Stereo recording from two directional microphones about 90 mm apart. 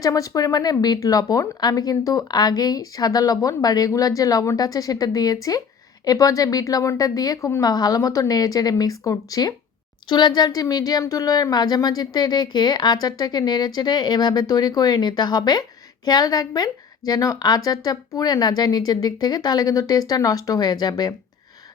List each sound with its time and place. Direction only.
0.0 s speech: 40° left (ahead or behind)
10.1 s speech: 55° left (ahead or behind)